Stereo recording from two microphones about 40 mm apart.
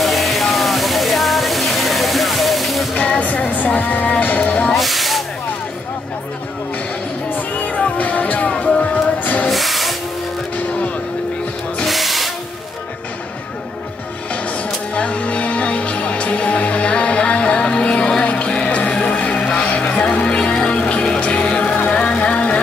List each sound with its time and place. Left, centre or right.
0.0 s music: centre
3.0 s music: left
4.7 s hiss: centre
7.2 s music: left
8.5 s music: left
9.5 s music: centre
11.8 s music: centre
15.0 s music: left